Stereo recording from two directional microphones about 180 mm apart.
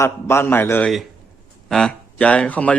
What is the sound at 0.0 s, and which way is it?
Speech, 15° left (ahead or behind).